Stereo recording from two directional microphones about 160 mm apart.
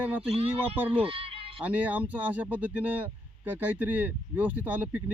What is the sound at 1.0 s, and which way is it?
Bleat, 35° right (ahead or behind).